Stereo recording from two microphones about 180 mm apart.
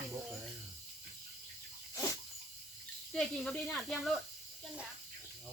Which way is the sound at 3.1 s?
5° left (ahead or behind).